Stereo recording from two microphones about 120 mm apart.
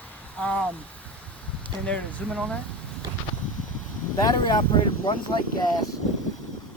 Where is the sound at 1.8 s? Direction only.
10° left (ahead or behind).